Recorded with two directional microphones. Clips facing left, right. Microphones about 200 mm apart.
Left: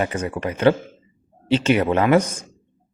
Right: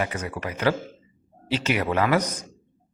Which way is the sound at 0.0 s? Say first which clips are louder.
Left 5 dB; 30° left (ahead or behind).